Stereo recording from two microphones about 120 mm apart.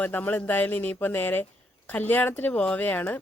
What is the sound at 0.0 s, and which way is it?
Speech, 15° left (ahead or behind).